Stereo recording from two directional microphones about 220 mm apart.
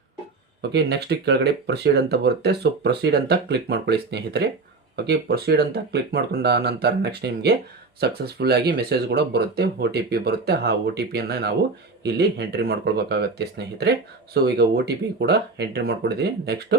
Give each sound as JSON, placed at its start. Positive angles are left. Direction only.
{"t": 0.6, "sound": "speech", "side_deg": -50}